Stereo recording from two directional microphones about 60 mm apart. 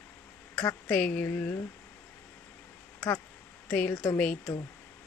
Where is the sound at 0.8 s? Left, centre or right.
Centre.